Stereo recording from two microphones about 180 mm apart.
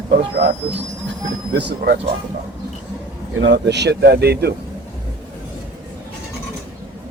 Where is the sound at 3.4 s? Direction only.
70° right (ahead or behind).